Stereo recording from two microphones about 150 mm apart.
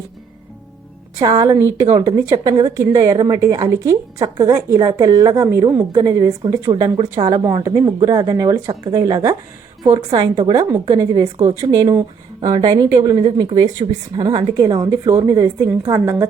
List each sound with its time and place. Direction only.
1.2 s a woman's voice: 25° right (ahead or behind)
11.3 s speech: 45° right (ahead or behind)
11.7 s a woman's voice: 25° right (ahead or behind)